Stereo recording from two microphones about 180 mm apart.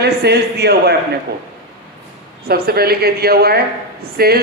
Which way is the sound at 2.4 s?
60° right (ahead or behind).